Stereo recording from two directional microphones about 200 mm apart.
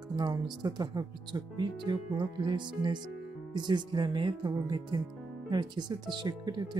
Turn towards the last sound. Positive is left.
turn(degrees=-20)  # may be behind; listen again after turning